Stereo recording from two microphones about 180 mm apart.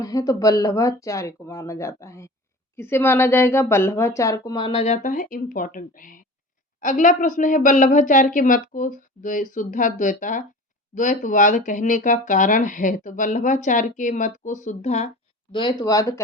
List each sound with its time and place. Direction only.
0.0 s a woman's voice: 20° left (ahead or behind); by 15.1 s 40° left (ahead or behind)
15.5 s speech: 25° left (ahead or behind)